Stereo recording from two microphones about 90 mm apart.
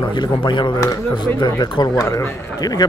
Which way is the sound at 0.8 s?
50° left (ahead or behind).